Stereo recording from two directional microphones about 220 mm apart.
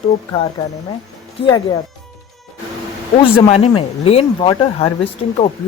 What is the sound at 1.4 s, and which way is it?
Speech, 20° left (ahead or behind).